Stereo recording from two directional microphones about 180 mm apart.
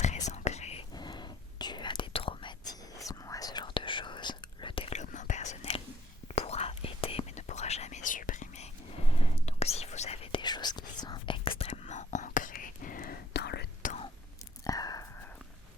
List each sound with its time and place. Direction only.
0.3 s whispering: 40° left (ahead or behind)
0.9 s whispering: 25° left (ahead or behind); by 13.9 s 65° left (ahead or behind)
14.6 s whispering: 20° left (ahead or behind)